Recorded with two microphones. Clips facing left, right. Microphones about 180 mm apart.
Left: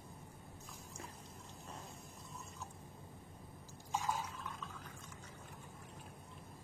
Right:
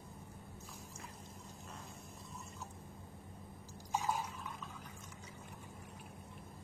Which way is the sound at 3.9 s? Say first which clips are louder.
Right 2 dB; 10° right (ahead or behind).